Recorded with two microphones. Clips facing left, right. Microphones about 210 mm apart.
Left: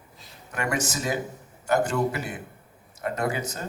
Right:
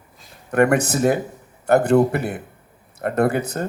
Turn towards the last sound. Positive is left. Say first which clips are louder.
# right 9 dB
turn(degrees=-60)  # may be behind; listen again after turning